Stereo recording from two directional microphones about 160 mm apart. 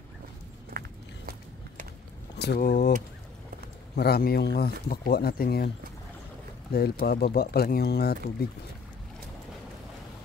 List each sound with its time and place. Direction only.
0.7 s walk: 65° right (ahead or behind)
2.3 s speech: 85° left
3.9 s speech: 80° left
6.7 s speech: 75° left (ahead or behind)